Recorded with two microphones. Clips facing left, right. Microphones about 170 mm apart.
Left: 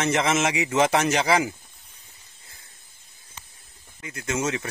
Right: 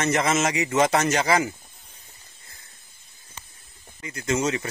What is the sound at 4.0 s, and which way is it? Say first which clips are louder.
Speech: right 3 dB; 5° left (ahead or behind).